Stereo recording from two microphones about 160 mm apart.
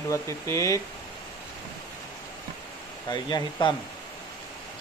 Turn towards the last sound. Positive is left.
turn(degrees=25)  # may be behind; listen again after turning